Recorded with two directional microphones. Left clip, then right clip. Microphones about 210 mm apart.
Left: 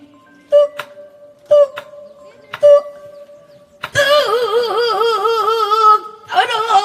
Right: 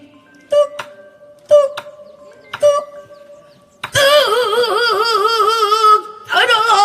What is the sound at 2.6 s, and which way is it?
Music, 60° right (ahead or behind).